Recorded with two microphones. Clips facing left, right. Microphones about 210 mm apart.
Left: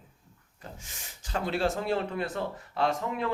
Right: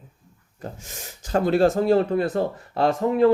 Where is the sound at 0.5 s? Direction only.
45° right (ahead or behind).